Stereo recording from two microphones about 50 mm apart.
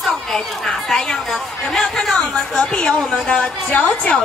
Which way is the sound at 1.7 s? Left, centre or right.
Centre.